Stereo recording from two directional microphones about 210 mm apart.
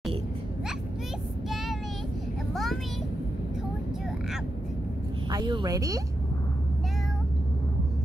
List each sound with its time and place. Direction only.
2.5 s vehicle: centre (ahead or behind)
5.3 s speech: 20° right (ahead or behind)